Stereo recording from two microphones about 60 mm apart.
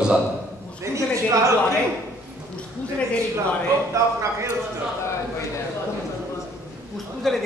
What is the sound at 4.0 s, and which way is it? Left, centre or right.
Speech, right.